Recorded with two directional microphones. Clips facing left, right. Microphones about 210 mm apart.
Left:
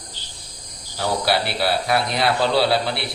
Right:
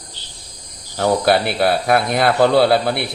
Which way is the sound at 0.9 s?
50° right (ahead or behind).